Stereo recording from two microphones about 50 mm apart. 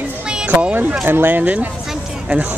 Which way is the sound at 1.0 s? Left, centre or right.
Right.